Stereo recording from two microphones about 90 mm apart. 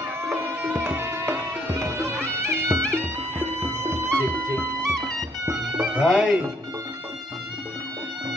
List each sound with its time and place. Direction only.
0.2 s music: 25° right (ahead or behind)
5.8 s speech: 10° right (ahead or behind)